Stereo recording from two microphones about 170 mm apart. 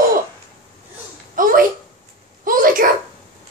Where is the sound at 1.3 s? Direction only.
55° right (ahead or behind).